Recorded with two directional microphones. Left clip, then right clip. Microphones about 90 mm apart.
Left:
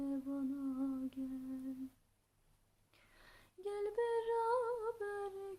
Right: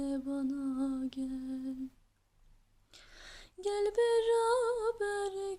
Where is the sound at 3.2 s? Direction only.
25° right (ahead or behind).